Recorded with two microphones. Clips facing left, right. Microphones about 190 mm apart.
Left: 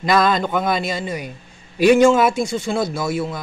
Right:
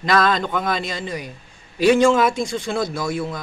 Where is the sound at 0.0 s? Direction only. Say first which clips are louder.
Left 2 dB; 5° left (ahead or behind).